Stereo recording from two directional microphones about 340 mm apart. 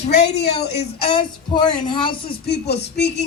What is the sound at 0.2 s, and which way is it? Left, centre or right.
Speech, left.